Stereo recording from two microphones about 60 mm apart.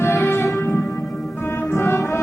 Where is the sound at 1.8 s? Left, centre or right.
Left.